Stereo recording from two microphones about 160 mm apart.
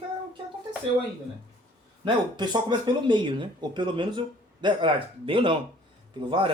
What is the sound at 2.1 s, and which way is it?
Speech, 25° right (ahead or behind).